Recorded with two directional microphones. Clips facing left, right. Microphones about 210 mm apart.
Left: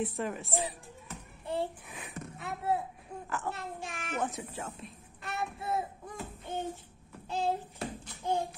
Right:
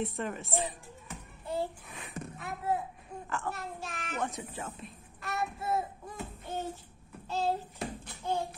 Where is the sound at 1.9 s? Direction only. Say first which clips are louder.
Left 1 dB; centre (ahead or behind).